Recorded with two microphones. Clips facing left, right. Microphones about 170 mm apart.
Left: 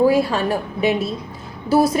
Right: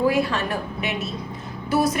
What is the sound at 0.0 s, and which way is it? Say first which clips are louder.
A woman's voice: left 5 dB; 30° left (ahead or behind).